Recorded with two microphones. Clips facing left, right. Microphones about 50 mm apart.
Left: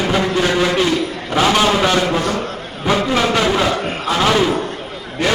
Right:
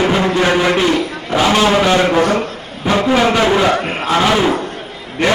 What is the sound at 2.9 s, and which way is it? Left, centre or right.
Speech, right.